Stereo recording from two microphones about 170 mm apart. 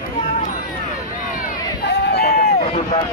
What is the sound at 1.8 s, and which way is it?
Run, 70° left (ahead or behind).